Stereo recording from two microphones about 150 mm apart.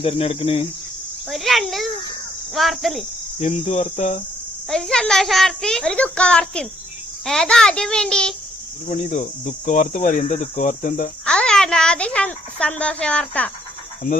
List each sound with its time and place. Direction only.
0.0 s speech: 40° left (ahead or behind)
1.3 s insect: centre (ahead or behind)
2.6 s a child's voice: centre (ahead or behind)
3.4 s cricket: 50° left (ahead or behind)
4.7 s a child's voice: 5° left (ahead or behind)
8.9 s cricket: 55° left (ahead or behind)
11.3 s a child's voice: 5° left (ahead or behind)